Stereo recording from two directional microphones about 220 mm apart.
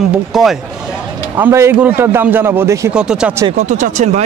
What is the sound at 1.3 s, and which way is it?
A man's voice, 10° right (ahead or behind).